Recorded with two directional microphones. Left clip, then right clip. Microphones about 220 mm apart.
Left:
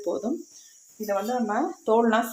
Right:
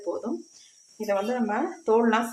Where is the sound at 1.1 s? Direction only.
10° left (ahead or behind).